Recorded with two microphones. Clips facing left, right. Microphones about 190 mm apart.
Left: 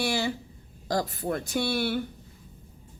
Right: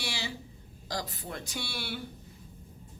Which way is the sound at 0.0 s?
50° left (ahead or behind).